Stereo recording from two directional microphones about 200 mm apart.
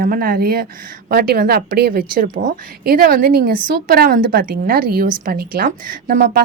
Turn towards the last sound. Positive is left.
turn(degrees=-45)  # may be behind; listen again after turning